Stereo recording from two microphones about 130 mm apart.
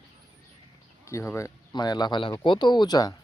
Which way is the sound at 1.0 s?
20° left (ahead or behind).